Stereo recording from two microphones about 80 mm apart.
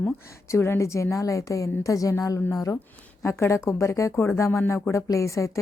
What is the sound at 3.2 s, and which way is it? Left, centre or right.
A woman's voice, left.